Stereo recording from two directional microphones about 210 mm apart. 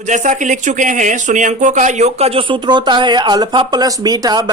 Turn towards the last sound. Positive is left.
turn(degrees=-20)  # may be behind; listen again after turning